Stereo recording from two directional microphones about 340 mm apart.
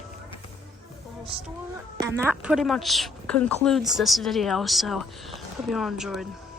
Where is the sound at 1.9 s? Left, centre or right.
Centre.